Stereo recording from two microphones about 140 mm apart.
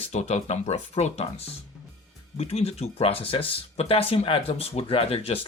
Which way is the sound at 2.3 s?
50° left (ahead or behind).